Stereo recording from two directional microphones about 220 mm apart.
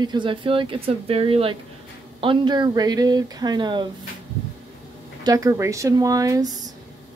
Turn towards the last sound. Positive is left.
turn(degrees=-15)  # may be behind; listen again after turning